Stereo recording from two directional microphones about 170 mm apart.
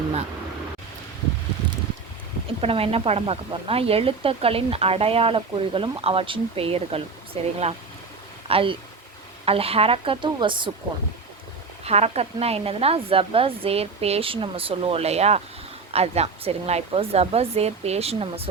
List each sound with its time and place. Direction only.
2.6 s speech: 35° right (ahead or behind)
11.9 s speech: 40° right (ahead or behind)